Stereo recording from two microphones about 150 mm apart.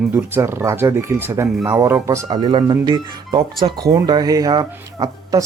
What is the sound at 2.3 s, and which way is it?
Speech, 30° right (ahead or behind).